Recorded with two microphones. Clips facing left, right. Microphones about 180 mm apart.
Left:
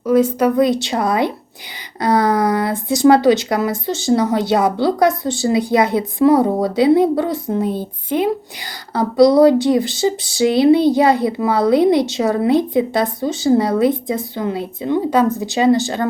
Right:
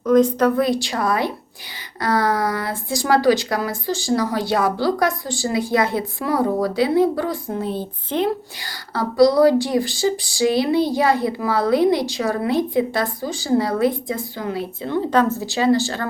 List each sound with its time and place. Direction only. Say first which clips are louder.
0.0 s speech: left 1 dB; 10° left (ahead or behind)